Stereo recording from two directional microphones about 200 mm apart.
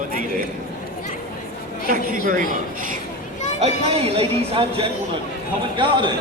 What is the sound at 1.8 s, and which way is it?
Speech, 45° right (ahead or behind).